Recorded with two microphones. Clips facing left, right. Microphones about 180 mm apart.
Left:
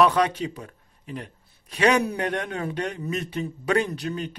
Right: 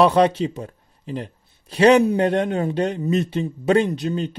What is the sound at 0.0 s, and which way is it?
A man's voice, 30° right (ahead or behind).